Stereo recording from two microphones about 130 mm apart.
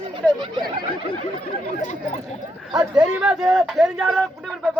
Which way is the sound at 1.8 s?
65° left (ahead or behind).